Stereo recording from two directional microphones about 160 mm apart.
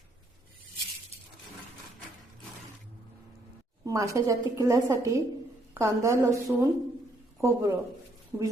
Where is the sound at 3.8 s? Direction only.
20° right (ahead or behind).